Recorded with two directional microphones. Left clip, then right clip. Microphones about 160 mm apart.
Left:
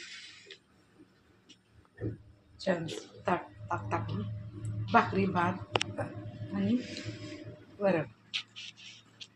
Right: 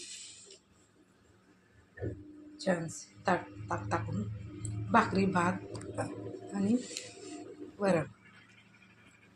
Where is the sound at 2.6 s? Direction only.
15° right (ahead or behind).